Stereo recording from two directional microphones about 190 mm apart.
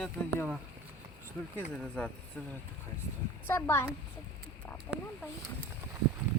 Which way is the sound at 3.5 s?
10° left (ahead or behind).